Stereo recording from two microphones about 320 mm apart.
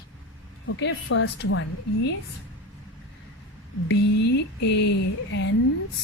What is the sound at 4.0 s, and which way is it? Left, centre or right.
Speech, left.